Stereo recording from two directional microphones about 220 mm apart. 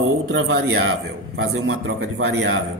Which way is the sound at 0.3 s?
70° right (ahead or behind).